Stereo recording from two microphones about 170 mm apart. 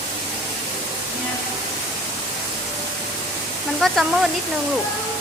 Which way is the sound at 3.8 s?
Centre (ahead or behind).